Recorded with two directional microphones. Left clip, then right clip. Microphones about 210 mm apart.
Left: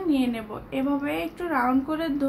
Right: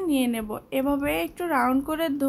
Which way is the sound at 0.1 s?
45° right (ahead or behind).